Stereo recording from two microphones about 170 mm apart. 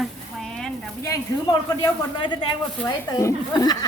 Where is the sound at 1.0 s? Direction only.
20° left (ahead or behind).